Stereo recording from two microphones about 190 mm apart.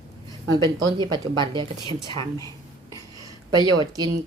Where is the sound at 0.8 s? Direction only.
25° right (ahead or behind).